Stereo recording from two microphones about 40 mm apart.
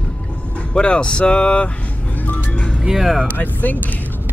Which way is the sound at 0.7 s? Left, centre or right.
Left.